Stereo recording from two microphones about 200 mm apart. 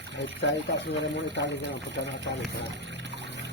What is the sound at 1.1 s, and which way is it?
Speech, 60° left (ahead or behind).